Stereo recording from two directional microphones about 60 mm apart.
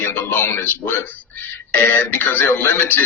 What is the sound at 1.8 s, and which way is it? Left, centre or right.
Speech, left.